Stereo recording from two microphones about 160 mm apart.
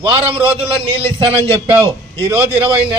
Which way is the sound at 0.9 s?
35° right (ahead or behind).